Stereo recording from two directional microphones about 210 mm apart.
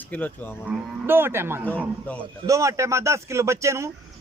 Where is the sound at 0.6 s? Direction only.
10° right (ahead or behind).